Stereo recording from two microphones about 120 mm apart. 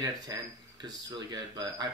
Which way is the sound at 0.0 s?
30° right (ahead or behind).